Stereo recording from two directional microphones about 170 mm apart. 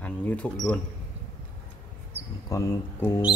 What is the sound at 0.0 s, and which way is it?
Speech, 10° left (ahead or behind).